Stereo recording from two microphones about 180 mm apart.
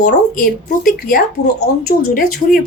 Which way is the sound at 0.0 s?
50° left (ahead or behind).